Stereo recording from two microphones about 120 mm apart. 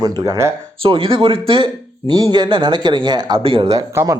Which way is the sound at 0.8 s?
50° right (ahead or behind).